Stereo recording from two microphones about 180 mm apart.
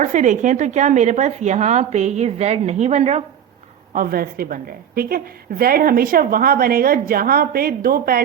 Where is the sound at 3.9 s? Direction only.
55° right (ahead or behind).